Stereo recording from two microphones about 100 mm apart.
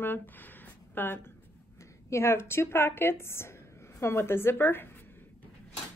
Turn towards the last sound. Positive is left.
turn(degrees=20)  # may be behind; listen again after turning